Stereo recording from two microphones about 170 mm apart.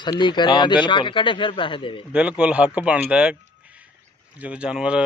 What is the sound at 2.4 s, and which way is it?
Speech, 5° right (ahead or behind).